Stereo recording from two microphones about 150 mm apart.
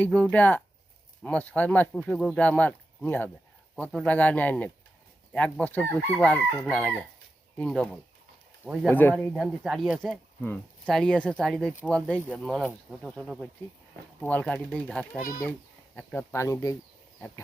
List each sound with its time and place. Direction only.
0.0 s speech: 10° left (ahead or behind)
8.6 s speech: 10° right (ahead or behind)
8.9 s speech: 10° left (ahead or behind)
9.3 s speech: centre (ahead or behind)
15.2 s speech: 70° left (ahead or behind)
16.0 s speech: 10° left (ahead or behind)